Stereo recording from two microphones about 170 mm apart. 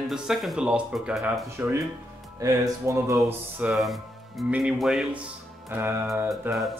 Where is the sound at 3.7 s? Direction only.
Centre (ahead or behind).